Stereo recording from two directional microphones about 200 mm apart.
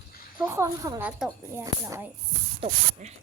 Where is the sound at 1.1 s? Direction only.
5° right (ahead or behind).